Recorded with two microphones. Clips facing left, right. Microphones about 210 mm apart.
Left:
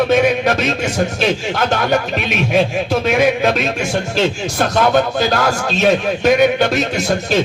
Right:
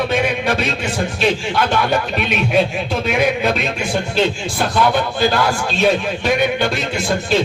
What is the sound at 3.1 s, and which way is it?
Speech, 45° left (ahead or behind).